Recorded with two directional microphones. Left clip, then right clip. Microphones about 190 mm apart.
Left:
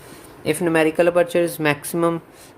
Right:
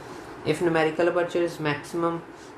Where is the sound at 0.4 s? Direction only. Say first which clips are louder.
Left 5 dB; 50° left (ahead or behind).